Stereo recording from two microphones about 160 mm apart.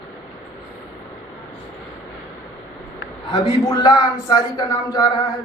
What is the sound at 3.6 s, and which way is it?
A man's voice, 20° left (ahead or behind).